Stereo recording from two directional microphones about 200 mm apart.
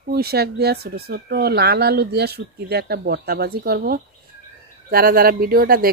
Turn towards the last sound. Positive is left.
turn(degrees=-50)  # may be behind; listen again after turning